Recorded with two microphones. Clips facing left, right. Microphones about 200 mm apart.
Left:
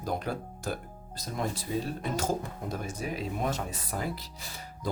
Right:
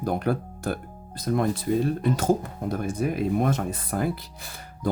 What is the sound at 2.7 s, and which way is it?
Speech, 55° right (ahead or behind).